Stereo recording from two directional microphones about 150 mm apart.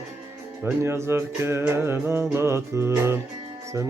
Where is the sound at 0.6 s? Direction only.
15° right (ahead or behind).